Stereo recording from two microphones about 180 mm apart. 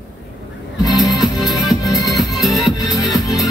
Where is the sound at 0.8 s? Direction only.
20° left (ahead or behind).